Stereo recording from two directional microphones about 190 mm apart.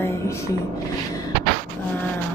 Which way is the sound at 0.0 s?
15° left (ahead or behind).